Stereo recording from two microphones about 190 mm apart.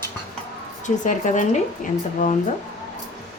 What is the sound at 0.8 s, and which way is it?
Speech, 40° left (ahead or behind).